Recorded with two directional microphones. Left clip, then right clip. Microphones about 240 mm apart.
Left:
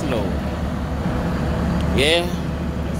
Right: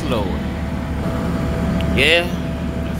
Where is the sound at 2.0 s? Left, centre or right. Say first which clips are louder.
Right 3 dB; centre.